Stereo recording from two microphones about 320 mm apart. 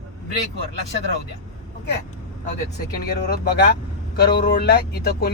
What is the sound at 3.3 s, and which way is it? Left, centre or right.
Speech, left.